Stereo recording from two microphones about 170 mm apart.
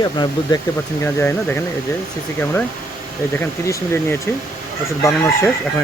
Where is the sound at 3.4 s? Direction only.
15° left (ahead or behind).